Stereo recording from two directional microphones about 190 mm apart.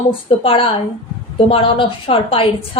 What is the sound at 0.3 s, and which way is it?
Speech, 30° left (ahead or behind).